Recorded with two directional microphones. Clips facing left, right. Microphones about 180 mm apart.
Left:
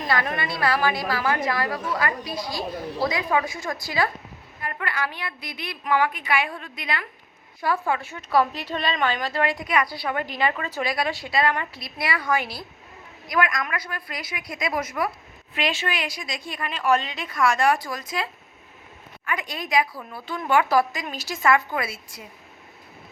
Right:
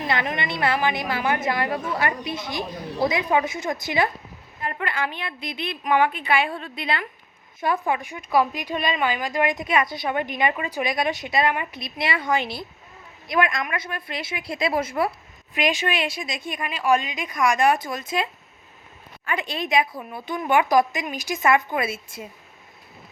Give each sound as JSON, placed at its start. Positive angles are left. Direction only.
{"t": 0.1, "sound": "speech", "side_deg": -20}
{"t": 15.5, "sound": "speech", "side_deg": -15}